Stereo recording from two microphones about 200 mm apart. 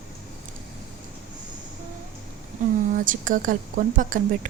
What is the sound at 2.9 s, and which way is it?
Speech, 40° right (ahead or behind).